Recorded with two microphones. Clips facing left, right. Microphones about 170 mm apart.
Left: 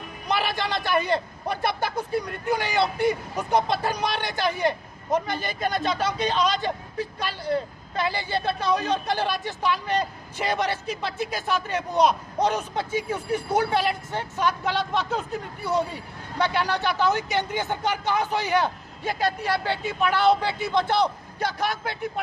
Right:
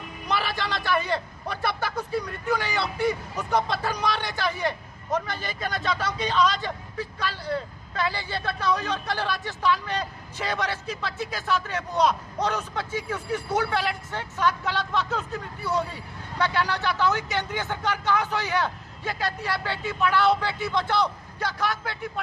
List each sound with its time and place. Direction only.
0.3 s a man's voice: 20° left (ahead or behind)